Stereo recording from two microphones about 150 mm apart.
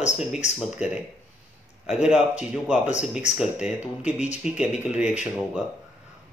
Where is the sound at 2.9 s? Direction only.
50° left (ahead or behind).